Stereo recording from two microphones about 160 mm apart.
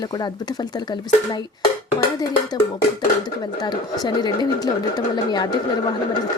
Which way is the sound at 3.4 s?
25° left (ahead or behind).